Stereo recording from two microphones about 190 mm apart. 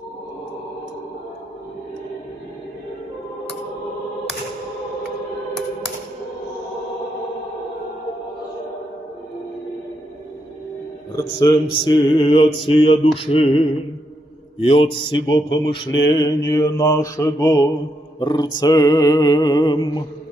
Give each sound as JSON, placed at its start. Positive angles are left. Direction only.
{"t": 11.1, "sound": "mantra", "side_deg": 20}
{"t": 13.2, "sound": "music", "side_deg": 30}
{"t": 14.6, "sound": "mantra", "side_deg": 25}